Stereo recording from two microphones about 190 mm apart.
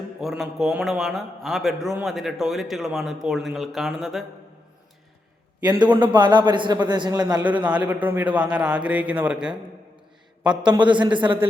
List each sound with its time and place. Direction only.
0.2 s a man's voice: centre (ahead or behind)
6.1 s a man's voice: 25° right (ahead or behind)
7.4 s a man's voice: 5° right (ahead or behind)
11.0 s a man's voice: 25° right (ahead or behind)